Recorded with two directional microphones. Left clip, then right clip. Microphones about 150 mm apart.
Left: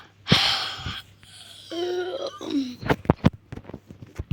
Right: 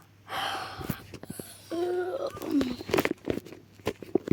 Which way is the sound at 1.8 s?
35° left (ahead or behind).